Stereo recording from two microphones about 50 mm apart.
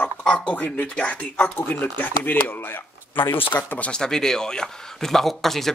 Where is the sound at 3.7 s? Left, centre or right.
Left.